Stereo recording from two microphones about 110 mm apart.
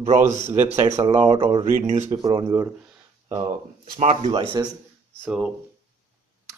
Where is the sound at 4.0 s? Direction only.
80° right.